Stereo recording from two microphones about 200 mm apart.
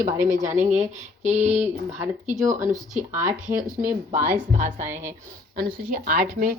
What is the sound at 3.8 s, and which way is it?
Speech, 10° right (ahead or behind).